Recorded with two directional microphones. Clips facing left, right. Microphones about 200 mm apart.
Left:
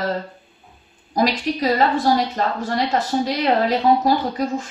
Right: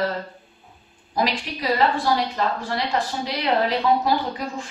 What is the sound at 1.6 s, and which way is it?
A woman's voice, 45° left (ahead or behind).